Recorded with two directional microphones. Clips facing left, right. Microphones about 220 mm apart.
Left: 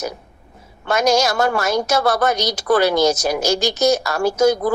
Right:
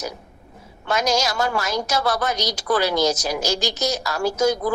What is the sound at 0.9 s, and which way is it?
A woman's voice, 55° left (ahead or behind).